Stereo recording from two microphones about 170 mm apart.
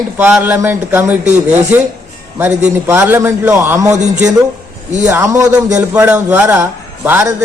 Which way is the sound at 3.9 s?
45° right (ahead or behind).